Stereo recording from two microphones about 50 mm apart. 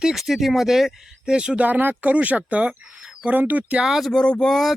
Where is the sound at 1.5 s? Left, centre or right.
Right.